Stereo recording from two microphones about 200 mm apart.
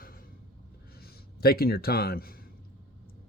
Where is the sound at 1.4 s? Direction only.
50° left (ahead or behind).